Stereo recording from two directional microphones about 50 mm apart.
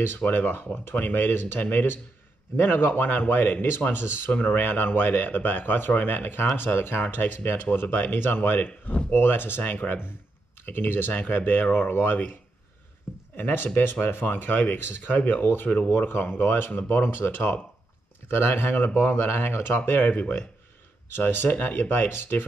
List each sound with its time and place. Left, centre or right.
0.3 s speech: left
4.3 s speech: left
13.4 s speech: left
15.6 s speech: left
16.1 s speech: left